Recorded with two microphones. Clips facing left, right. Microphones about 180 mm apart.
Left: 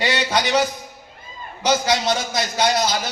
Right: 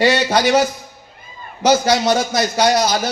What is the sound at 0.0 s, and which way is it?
Speech, 50° right (ahead or behind).